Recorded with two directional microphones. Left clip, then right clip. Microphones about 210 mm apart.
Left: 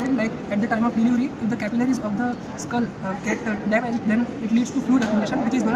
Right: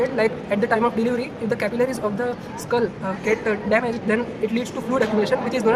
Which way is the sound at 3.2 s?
60° right (ahead or behind).